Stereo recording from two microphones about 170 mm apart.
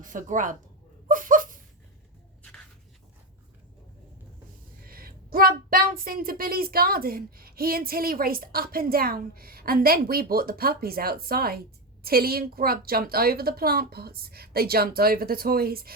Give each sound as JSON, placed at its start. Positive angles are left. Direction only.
{"t": 0.0, "sound": "a woman's voice", "side_deg": -50}
{"t": 1.0, "sound": "a sound", "side_deg": -50}
{"t": 4.9, "sound": "speech", "side_deg": -60}